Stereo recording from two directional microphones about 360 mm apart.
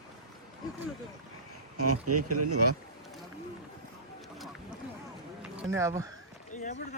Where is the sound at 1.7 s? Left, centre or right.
Right.